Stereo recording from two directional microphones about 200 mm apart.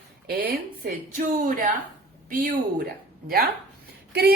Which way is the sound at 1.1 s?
40° right (ahead or behind).